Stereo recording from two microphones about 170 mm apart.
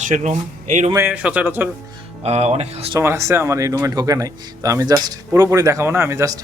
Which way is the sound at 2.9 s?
15° right (ahead or behind).